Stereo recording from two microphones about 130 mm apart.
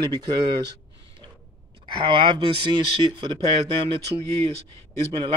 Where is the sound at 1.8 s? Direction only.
35° right (ahead or behind).